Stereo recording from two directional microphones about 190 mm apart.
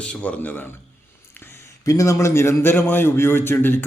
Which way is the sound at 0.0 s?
5° left (ahead or behind).